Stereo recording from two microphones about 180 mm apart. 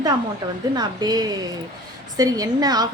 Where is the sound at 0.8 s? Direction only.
20° right (ahead or behind).